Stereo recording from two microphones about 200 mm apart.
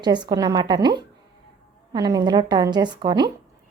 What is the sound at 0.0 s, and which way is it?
A woman's voice, 20° right (ahead or behind).